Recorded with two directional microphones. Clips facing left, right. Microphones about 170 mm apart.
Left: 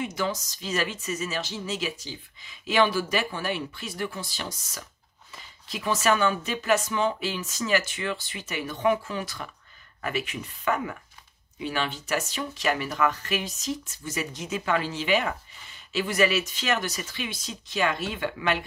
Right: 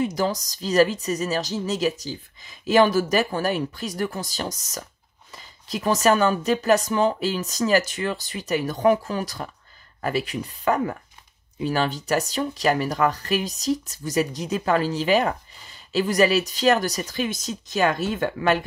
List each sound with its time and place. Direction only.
0.0 s speech: 35° right (ahead or behind)